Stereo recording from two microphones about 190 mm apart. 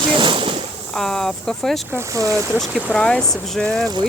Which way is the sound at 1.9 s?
15° right (ahead or behind).